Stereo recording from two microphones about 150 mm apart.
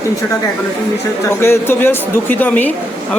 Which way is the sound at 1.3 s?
15° left (ahead or behind).